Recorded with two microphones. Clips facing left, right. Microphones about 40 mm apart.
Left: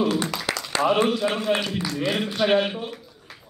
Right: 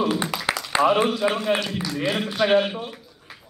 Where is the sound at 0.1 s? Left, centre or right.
Centre.